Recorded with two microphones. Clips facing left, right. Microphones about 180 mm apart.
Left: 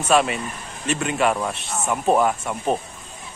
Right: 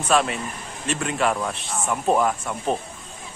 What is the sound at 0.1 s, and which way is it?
Speech, 5° left (ahead or behind).